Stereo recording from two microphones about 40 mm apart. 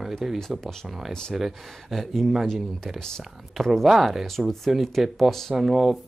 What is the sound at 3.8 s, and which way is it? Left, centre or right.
Speech, centre.